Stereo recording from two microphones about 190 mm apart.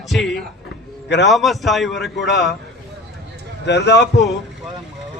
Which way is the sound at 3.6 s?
65° left (ahead or behind).